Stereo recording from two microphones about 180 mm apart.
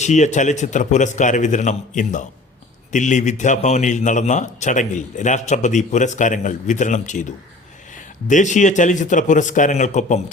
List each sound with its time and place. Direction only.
0.0 s a man's voice: 40° left (ahead or behind)